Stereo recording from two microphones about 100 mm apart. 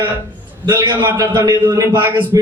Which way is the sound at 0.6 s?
40° right (ahead or behind).